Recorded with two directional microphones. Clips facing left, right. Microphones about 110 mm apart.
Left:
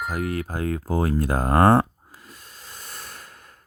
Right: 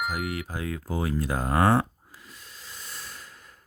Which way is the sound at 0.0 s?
45° left (ahead or behind).